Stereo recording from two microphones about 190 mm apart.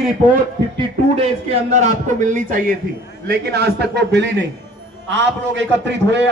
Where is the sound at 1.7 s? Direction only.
40° right (ahead or behind).